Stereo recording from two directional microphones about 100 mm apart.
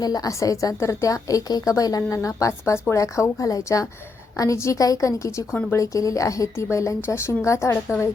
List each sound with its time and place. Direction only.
0.0 s a woman's voice: 40° left (ahead or behind)